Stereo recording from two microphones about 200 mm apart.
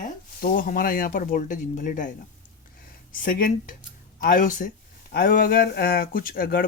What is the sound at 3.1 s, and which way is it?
Speech, 45° left (ahead or behind).